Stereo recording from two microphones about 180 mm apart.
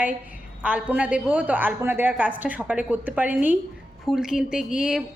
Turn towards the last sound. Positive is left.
turn(degrees=-5)  # may be behind; listen again after turning